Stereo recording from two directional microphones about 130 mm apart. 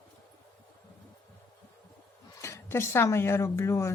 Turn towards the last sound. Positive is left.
turn(degrees=20)  # may be behind; listen again after turning